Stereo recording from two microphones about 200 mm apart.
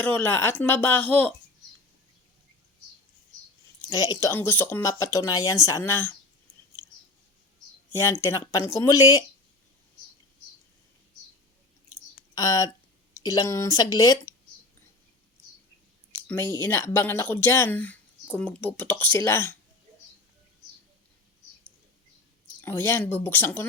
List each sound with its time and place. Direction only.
0.0 s speech: 10° left (ahead or behind)
3.8 s speech: 15° left (ahead or behind)
7.9 s speech: 15° left (ahead or behind)
12.3 s speech: 15° left (ahead or behind)
16.2 s speech: 10° left (ahead or behind)
22.6 s speech: 10° left (ahead or behind)